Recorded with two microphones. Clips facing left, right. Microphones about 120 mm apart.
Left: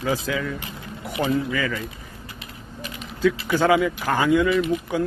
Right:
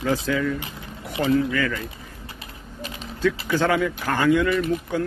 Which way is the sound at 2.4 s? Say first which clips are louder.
Even; 35° right (ahead or behind).